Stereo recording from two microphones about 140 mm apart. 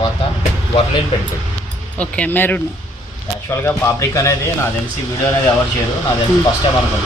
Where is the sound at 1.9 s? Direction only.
10° left (ahead or behind).